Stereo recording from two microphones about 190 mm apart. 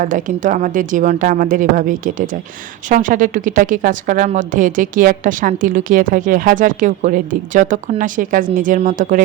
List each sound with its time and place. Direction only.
0.0 s a woman's voice: 45° right (ahead or behind)